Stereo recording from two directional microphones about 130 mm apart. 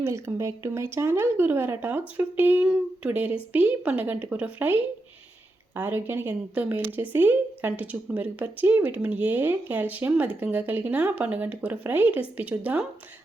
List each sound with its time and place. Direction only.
0.0 s speech: 20° right (ahead or behind)